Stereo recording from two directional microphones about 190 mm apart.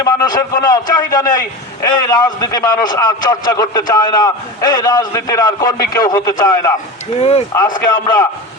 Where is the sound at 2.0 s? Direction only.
20° left (ahead or behind).